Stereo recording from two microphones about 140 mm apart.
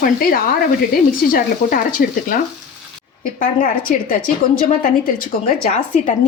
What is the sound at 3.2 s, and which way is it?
A woman's voice, 70° left (ahead or behind).